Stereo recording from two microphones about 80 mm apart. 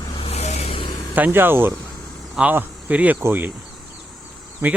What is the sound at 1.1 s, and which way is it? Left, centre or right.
Speech, right.